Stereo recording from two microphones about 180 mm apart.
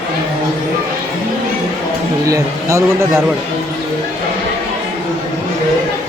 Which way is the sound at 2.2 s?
15° right (ahead or behind).